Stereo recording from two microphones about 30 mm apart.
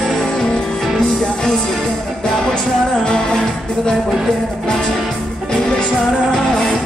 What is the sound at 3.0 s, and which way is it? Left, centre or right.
Music, left.